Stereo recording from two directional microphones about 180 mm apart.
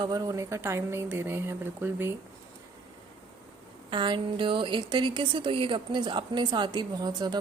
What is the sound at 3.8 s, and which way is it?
A woman's voice, 25° right (ahead or behind).